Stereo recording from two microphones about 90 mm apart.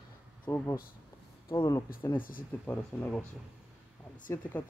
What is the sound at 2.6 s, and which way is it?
Speech, 15° left (ahead or behind).